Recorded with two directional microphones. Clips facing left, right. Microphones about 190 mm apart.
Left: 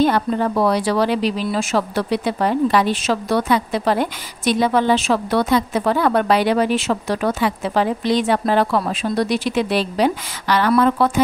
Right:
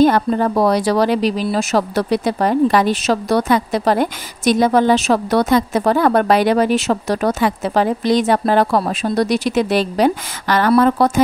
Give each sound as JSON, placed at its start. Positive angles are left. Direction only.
{"t": 0.0, "sound": "speech", "side_deg": -45}